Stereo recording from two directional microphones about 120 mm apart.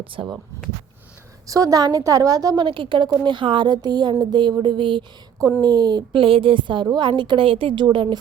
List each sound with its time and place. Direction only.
0.0 s speech: 45° right (ahead or behind)
1.5 s a woman's voice: 30° right (ahead or behind)
2.6 s speech: 45° right (ahead or behind)